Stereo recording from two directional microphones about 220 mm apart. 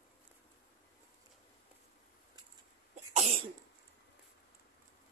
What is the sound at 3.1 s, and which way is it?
Cough, 30° right (ahead or behind).